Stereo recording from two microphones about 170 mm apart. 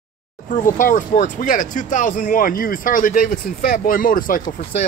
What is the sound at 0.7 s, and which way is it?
Speech, 50° left (ahead or behind).